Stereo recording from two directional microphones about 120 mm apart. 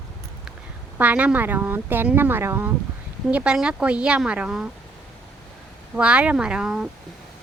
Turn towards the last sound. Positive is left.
turn(degrees=-5)  # may be behind; listen again after turning